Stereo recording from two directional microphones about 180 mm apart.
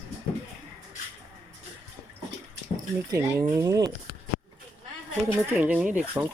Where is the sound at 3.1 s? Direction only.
15° right (ahead or behind).